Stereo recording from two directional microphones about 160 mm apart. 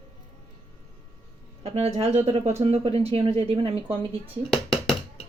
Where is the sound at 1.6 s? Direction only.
40° right (ahead or behind).